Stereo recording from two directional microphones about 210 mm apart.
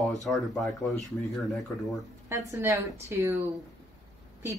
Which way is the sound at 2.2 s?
15° right (ahead or behind).